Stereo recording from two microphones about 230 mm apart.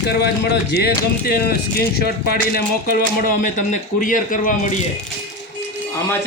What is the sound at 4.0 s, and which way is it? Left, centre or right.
Speech, left.